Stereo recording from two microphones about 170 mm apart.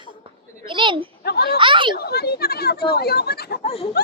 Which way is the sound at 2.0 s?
70° left (ahead or behind).